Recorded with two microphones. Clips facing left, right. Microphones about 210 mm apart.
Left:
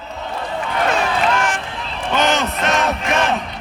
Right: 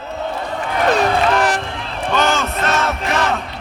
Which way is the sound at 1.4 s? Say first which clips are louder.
Right 4 dB; 40° right (ahead or behind).